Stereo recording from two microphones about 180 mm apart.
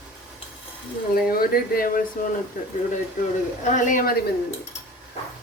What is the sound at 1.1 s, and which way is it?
Speech, 55° left (ahead or behind).